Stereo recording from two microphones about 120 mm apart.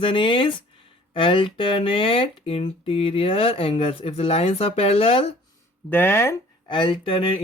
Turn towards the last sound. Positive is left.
turn(degrees=45)  # may be behind; listen again after turning